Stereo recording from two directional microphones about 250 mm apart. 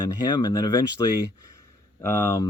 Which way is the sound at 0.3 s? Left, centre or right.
Centre.